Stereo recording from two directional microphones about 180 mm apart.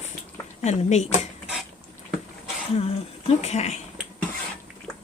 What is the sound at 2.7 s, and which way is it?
Speech, 35° left (ahead or behind).